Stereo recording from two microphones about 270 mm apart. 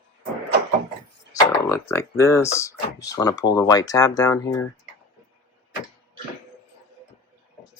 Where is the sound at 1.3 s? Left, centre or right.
Centre.